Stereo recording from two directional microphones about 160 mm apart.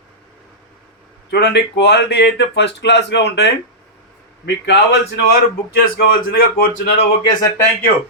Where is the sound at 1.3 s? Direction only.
90° left.